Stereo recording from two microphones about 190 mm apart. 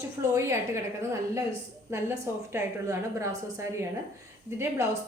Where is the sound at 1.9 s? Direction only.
15° right (ahead or behind).